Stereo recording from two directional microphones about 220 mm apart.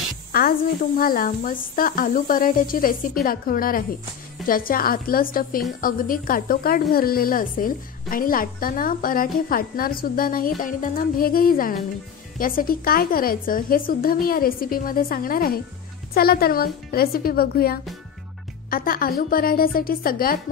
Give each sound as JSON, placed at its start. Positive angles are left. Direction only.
{"t": 0.3, "sound": "a woman's voice", "side_deg": 40}